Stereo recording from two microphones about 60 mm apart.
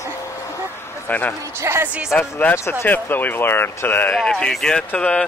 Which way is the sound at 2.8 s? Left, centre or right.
Left.